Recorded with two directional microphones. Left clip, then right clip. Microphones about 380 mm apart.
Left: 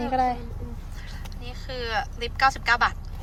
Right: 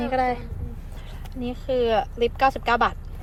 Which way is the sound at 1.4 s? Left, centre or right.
Centre.